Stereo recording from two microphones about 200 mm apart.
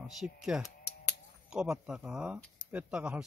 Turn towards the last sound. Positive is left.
turn(degrees=-5)  # may be behind; listen again after turning